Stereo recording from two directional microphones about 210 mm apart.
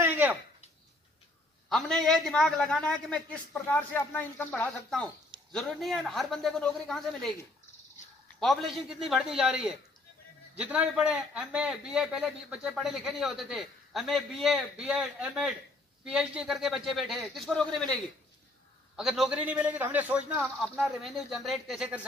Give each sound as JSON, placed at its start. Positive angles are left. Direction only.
{"t": 0.0, "sound": "a sound", "side_deg": -10}
{"t": 1.7, "sound": "a man's voice", "side_deg": 0}
{"t": 8.4, "sound": "a man's voice", "side_deg": 0}
{"t": 18.9, "sound": "a man's voice", "side_deg": 0}